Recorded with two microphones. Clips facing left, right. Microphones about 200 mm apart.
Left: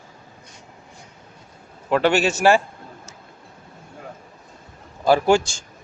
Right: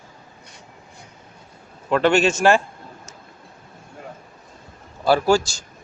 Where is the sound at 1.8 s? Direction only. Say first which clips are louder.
Right 1 dB; 10° left (ahead or behind).